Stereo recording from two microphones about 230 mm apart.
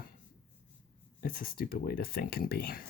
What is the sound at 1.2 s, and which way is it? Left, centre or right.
Speech, left.